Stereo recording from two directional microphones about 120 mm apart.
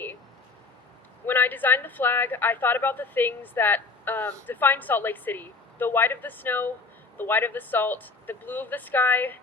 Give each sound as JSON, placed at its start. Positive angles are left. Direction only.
{"t": 1.3, "sound": "speech", "side_deg": 15}